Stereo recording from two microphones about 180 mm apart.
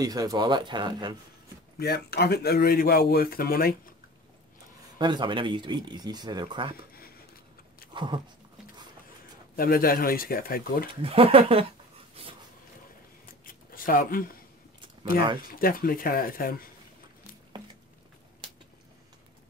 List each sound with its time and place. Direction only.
0.0 s speech: 20° right (ahead or behind)
1.8 s speech: 60° left (ahead or behind)
4.9 s speech: 25° right (ahead or behind)
7.9 s speech: 25° right (ahead or behind)
9.6 s speech: 55° left (ahead or behind)
11.0 s speech: 30° right (ahead or behind)
12.2 s a sound: 30° right (ahead or behind)
13.7 s speech: 50° left (ahead or behind)